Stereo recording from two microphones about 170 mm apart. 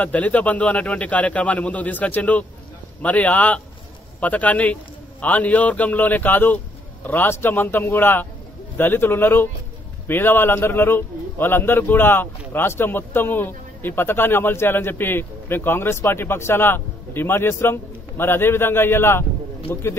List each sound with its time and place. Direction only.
0.0 s a man's voice: 10° left (ahead or behind)